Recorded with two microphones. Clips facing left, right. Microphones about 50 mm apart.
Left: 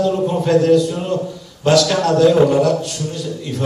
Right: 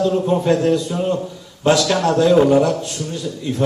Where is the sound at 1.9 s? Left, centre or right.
Right.